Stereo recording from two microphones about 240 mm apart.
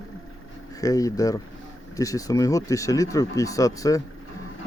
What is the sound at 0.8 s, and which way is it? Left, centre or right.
Speech, centre.